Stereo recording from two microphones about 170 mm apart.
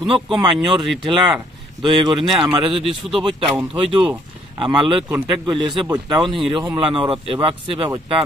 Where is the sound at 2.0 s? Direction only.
30° right (ahead or behind).